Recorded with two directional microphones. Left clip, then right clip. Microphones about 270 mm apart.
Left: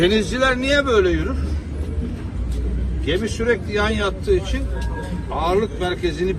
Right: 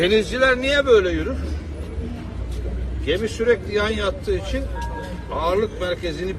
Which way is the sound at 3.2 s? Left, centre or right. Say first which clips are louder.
Right 1 dB; centre.